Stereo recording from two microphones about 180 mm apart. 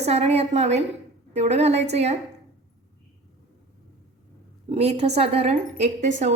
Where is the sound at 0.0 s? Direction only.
35° right (ahead or behind).